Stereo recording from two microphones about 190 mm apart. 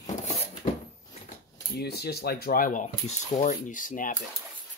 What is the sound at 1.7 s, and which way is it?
Speech, 60° left (ahead or behind).